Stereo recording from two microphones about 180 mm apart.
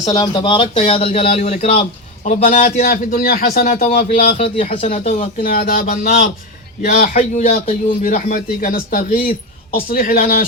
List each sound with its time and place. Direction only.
0.0 s speech: 25° left (ahead or behind); by 2.6 s 40° left (ahead or behind)
2.7 s speech: 50° left (ahead or behind)
4.4 s speech: 35° left (ahead or behind)
5.4 s speech: 50° left (ahead or behind)